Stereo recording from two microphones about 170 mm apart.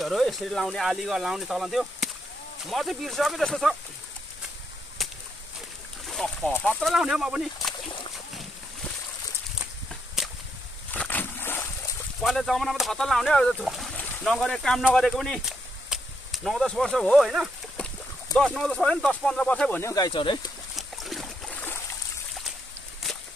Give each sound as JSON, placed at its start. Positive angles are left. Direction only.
{"t": 0.0, "sound": "speech", "side_deg": 0}
{"t": 6.0, "sound": "boat", "side_deg": 0}
{"t": 6.5, "sound": "speech", "side_deg": 5}
{"t": 10.9, "sound": "a sound", "side_deg": 10}
{"t": 12.2, "sound": "speech", "side_deg": 0}
{"t": 20.1, "sound": "speech", "side_deg": 30}
{"t": 20.7, "sound": "boat", "side_deg": 0}